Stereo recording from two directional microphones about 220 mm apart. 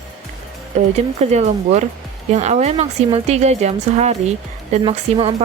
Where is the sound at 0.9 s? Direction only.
30° right (ahead or behind).